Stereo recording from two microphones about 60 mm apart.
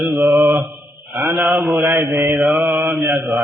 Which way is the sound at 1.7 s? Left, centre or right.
Right.